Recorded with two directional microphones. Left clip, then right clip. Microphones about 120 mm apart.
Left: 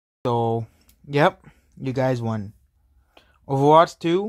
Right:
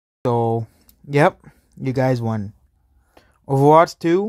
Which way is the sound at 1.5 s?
40° right (ahead or behind).